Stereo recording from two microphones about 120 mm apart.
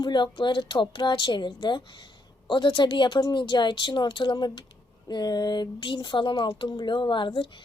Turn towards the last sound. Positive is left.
turn(degrees=45)  # may be behind; listen again after turning